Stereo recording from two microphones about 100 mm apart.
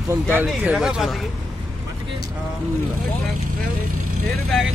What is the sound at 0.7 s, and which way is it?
Speech, 5° right (ahead or behind).